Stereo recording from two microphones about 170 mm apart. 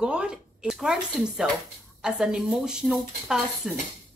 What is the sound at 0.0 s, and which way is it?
A woman's voice, 5° right (ahead or behind).